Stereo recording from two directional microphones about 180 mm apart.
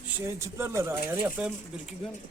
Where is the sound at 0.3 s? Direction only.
15° right (ahead or behind).